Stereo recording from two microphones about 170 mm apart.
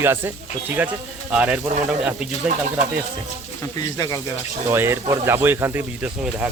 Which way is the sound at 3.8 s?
20° left (ahead or behind).